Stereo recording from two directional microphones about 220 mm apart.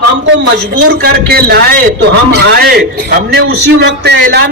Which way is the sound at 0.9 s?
45° right (ahead or behind).